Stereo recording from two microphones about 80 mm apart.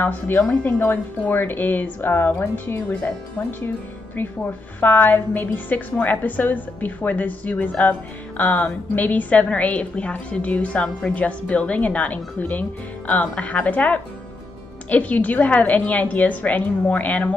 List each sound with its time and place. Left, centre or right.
0.0 s a woman's voice: left